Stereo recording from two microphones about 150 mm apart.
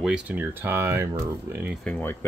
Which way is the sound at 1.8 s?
10° left (ahead or behind).